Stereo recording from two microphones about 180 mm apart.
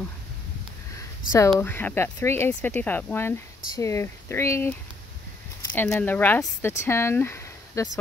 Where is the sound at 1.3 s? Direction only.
15° left (ahead or behind).